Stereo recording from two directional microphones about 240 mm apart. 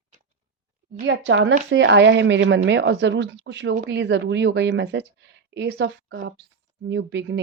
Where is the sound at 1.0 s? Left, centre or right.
Right.